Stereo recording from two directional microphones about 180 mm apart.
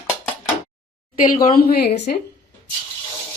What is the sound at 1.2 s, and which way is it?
Speech, 50° left (ahead or behind).